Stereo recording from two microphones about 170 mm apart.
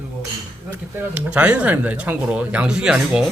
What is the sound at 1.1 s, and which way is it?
Speech, 5° right (ahead or behind).